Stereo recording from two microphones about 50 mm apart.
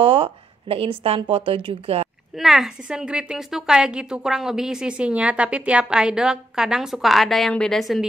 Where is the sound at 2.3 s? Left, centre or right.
Centre.